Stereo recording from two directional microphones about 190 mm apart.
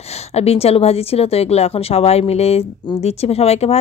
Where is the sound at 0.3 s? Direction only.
35° left (ahead or behind).